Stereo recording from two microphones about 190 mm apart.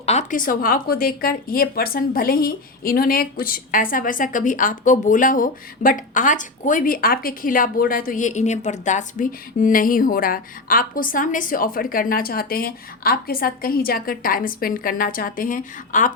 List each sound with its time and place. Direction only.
0.0 s a woman's voice: 35° left (ahead or behind)